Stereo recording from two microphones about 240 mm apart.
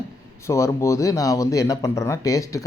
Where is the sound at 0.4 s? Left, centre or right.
Centre.